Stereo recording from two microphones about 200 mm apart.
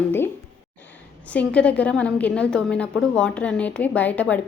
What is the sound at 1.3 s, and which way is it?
A woman's voice, 5° left (ahead or behind).